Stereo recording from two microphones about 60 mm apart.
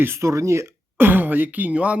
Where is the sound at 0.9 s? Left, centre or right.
Right.